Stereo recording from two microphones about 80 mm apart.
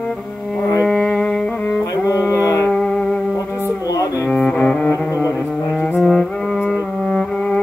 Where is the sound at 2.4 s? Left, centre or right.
Left.